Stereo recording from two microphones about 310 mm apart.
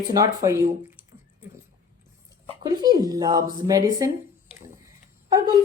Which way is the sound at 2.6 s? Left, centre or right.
Centre.